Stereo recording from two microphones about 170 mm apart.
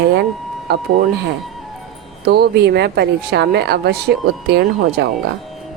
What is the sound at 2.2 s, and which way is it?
A woman's voice, 70° right (ahead or behind).